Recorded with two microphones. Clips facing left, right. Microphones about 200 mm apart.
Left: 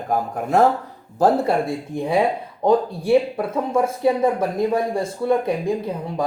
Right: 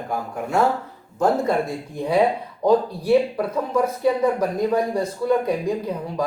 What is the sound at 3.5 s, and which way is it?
Speech, 25° left (ahead or behind).